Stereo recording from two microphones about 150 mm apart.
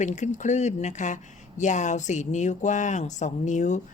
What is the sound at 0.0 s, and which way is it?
A woman's voice, 55° left (ahead or behind).